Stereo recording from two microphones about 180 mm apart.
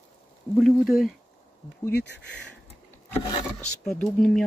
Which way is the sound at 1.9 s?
70° left (ahead or behind).